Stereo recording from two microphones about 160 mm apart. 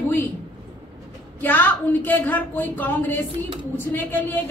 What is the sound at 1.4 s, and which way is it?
A woman's voice, 10° left (ahead or behind).